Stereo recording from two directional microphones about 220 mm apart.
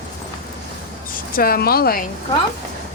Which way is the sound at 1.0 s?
40° left (ahead or behind).